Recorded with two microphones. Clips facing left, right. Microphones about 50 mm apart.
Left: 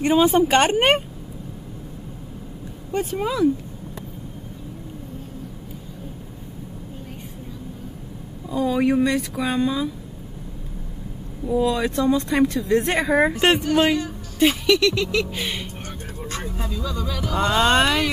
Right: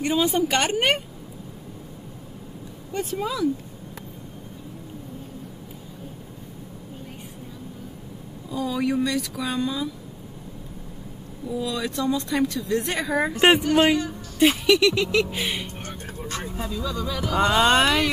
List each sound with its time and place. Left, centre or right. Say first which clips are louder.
0.0 s speech: left 5 dB; left
2.9 s speech: left 3 dB; left
8.5 s speech: left 5 dB; left
11.4 s speech: left 7 dB; left
13.4 s speech: right 1 dB; centre
14.4 s music: even; centre
14.8 s speech: even; centre
16.4 s a sound: right 1 dB; centre
17.2 s music: even; centre